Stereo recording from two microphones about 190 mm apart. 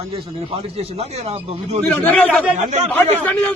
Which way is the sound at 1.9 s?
5° left (ahead or behind).